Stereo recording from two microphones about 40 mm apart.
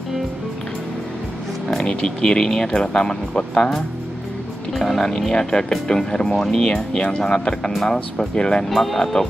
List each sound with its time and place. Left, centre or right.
1.7 s speech: centre
4.7 s speech: centre
6.6 s speech: left
8.4 s speech: left
8.6 s speech: centre